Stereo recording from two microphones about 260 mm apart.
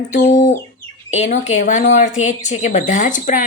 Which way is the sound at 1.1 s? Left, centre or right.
Left.